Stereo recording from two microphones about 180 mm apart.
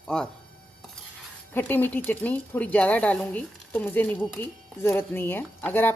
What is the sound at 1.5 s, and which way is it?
Speech, 10° left (ahead or behind).